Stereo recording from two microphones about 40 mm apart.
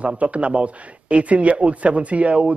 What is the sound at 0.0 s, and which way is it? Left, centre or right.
Speech, right.